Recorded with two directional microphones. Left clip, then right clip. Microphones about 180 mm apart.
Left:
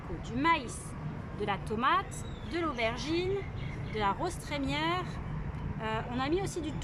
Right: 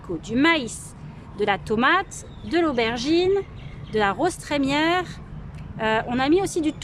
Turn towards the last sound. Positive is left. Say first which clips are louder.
# right 12 dB
turn(degrees=-65)  # may be behind; listen again after turning